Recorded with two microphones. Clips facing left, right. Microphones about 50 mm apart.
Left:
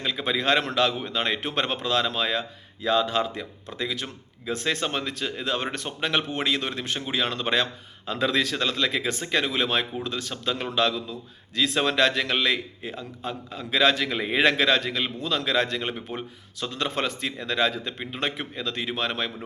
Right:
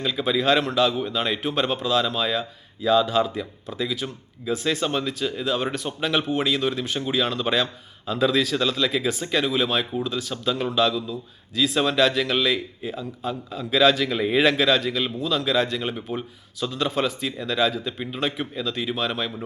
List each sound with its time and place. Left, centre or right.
0.0 s a man's voice: left
0.3 s a man's voice: left
14.4 s speech: left
15.8 s speech: left